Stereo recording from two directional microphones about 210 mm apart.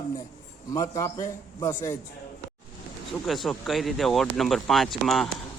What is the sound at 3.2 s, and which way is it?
Speech, centre (ahead or behind).